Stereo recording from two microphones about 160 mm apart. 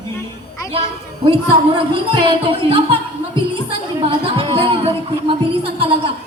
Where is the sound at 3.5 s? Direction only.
30° right (ahead or behind).